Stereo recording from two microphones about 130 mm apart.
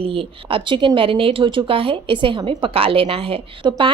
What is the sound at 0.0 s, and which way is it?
Speech, 45° right (ahead or behind).